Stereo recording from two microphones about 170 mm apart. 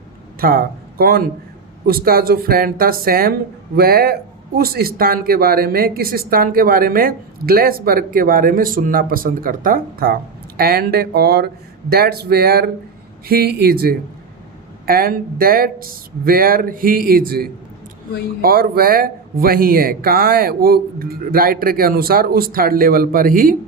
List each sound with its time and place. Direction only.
0.3 s speech: 60° right (ahead or behind)